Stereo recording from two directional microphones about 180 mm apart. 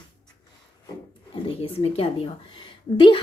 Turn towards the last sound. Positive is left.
turn(degrees=25)  # may be behind; listen again after turning